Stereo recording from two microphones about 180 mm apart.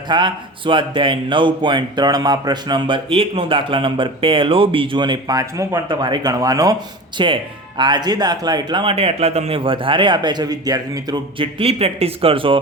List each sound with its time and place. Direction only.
0.1 s speech: 25° right (ahead or behind)